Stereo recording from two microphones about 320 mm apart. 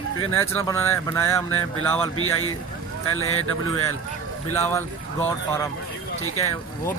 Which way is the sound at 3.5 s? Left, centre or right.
Right.